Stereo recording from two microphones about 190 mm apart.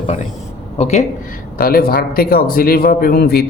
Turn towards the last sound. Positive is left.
turn(degrees=55)  # may be behind; listen again after turning